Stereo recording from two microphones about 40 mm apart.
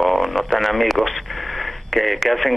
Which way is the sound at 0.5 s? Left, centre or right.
Centre.